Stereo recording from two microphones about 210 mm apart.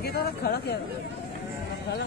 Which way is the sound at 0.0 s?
50° left (ahead or behind).